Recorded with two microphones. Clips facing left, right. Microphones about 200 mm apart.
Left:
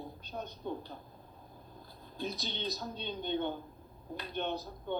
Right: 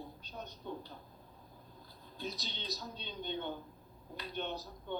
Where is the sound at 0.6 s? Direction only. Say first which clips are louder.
Left 4 dB; 50° left (ahead or behind).